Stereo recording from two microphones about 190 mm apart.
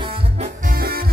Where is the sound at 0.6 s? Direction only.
50° right (ahead or behind).